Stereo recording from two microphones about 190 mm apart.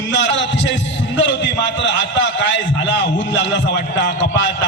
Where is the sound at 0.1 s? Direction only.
70° left (ahead or behind).